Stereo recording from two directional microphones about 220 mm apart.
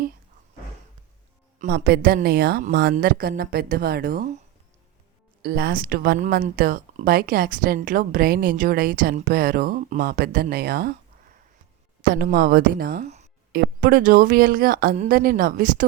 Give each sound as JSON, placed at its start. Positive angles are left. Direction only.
{"t": 1.5, "sound": "speech", "side_deg": -45}
{"t": 5.4, "sound": "speech", "side_deg": -45}
{"t": 12.0, "sound": "speech", "side_deg": -40}